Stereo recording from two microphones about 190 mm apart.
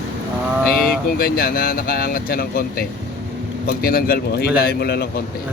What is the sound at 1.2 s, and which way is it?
Speech, 50° left (ahead or behind).